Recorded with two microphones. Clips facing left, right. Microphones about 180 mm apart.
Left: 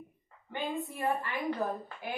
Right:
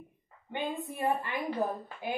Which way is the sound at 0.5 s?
20° right (ahead or behind).